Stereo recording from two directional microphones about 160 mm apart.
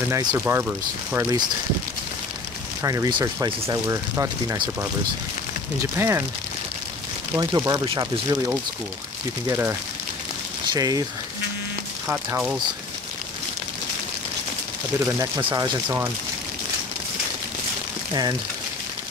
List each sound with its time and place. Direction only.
0.1 s speech: 25° right (ahead or behind)
0.4 s speech: 15° right (ahead or behind)
2.8 s speech: 20° right (ahead or behind)
3.1 s speech: 30° right (ahead or behind)
5.9 s speech: 15° right (ahead or behind)
7.3 s speech: 25° right (ahead or behind)
9.5 s speech: 15° right (ahead or behind)
12.1 s speech: 10° right (ahead or behind)
15.0 s speech: 20° right (ahead or behind)